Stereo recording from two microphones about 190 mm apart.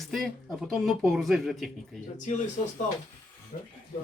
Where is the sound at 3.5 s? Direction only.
35° left (ahead or behind).